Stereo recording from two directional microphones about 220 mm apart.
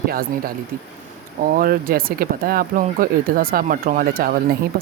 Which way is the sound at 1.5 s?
40° right (ahead or behind).